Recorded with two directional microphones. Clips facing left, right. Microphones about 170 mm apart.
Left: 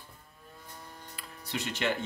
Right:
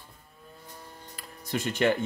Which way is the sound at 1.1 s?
45° right (ahead or behind).